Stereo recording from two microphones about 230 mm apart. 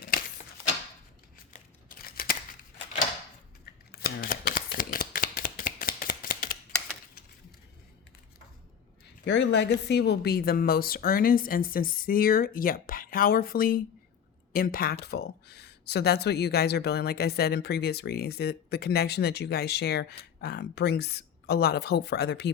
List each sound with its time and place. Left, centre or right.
0.0 s a sound: left
1.5 s crumpling: left
3.9 s shuffling cards: left
9.2 s a woman's voice: left